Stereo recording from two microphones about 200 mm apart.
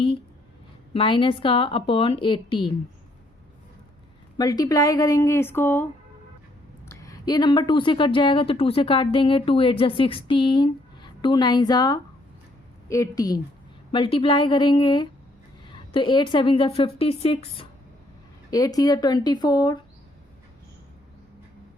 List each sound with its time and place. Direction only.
0.9 s a woman's voice: 25° left (ahead or behind)
4.4 s a woman's voice: 20° left (ahead or behind)
6.8 s a woman's voice: 15° left (ahead or behind)